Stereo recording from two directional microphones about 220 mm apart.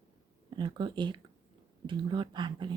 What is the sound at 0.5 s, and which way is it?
Speech, 20° right (ahead or behind).